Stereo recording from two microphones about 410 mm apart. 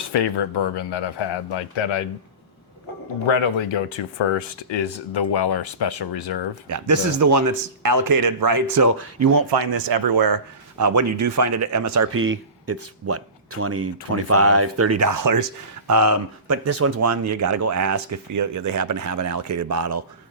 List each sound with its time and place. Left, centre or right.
0.1 s speech: left
3.2 s speech: left
4.7 s speech: left
6.7 s speech: right
9.3 s speech: right
10.8 s speech: right